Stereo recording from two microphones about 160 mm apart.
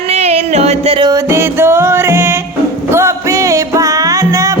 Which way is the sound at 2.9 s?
15° right (ahead or behind).